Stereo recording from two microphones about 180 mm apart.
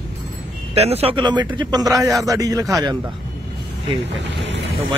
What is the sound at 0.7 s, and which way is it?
Speech, 35° right (ahead or behind).